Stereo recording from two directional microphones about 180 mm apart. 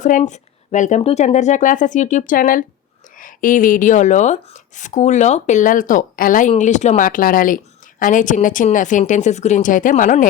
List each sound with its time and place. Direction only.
0.0 s a woman's voice: 40° left (ahead or behind)